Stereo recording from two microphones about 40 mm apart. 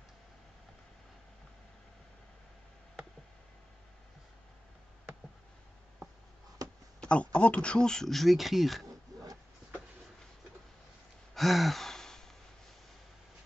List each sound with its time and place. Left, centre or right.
7.0 s speech: left
8.1 s speech: centre
11.3 s sigh: centre